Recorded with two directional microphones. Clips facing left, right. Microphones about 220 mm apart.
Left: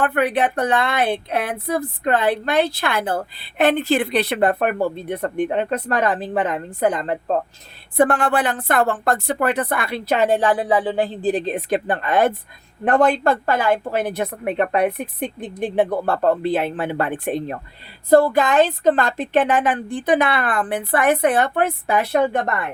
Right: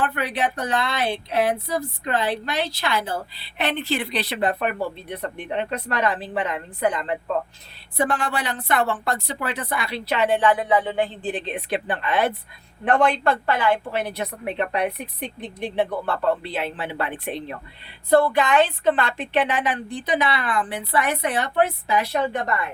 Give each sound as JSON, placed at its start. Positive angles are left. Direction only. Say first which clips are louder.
{"t": 0.0, "sound": "a woman's voice", "louder": "left 5 dB", "side_deg": 55}
{"t": 7.9, "sound": "a woman's voice", "louder": "left 7 dB", "side_deg": 55}